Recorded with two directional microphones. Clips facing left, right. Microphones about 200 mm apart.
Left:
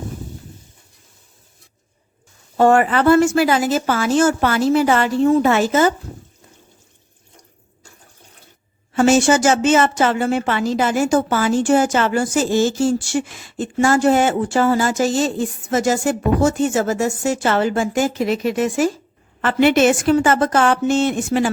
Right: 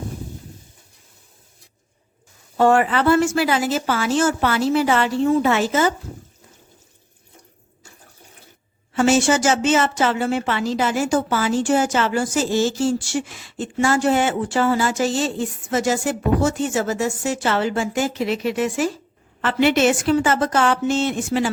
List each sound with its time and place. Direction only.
2.6 s speech: 50° left (ahead or behind)
8.9 s speech: 45° left (ahead or behind)